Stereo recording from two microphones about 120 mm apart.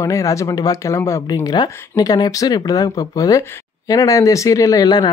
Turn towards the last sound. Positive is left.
turn(degrees=30)  # may be behind; listen again after turning